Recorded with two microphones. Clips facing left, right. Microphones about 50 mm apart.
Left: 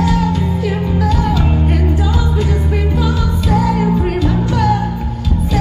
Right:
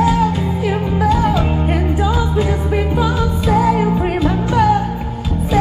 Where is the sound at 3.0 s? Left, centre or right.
Centre.